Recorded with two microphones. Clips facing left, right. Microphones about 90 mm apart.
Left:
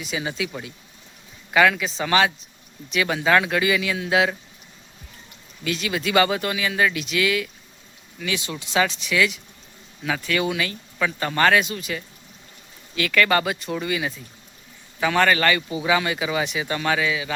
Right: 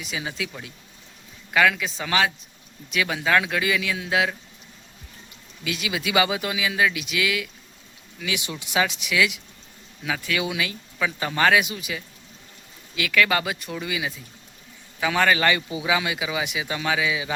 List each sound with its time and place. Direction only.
0.0 s speech: centre (ahead or behind)
5.6 s speech: 5° right (ahead or behind)
8.4 s speech: 15° right (ahead or behind)
15.9 s speech: 5° right (ahead or behind)